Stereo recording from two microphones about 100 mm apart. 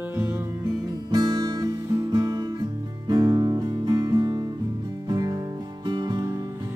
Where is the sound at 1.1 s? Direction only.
45° right (ahead or behind).